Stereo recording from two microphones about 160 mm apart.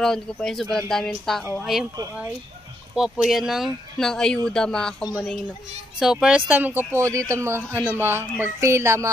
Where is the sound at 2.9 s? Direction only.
5° right (ahead or behind).